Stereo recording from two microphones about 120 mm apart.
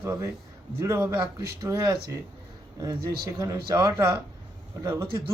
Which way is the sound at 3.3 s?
25° right (ahead or behind).